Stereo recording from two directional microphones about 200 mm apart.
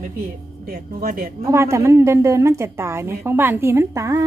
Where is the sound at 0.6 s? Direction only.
45° right (ahead or behind).